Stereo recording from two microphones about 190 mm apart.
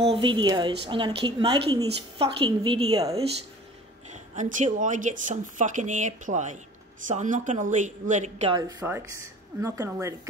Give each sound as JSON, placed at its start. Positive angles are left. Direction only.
{"t": 0.0, "sound": "a woman's voice", "side_deg": -30}
{"t": 4.1, "sound": "a sound", "side_deg": -40}
{"t": 4.7, "sound": "speech", "side_deg": -40}
{"t": 8.5, "sound": "speech", "side_deg": -20}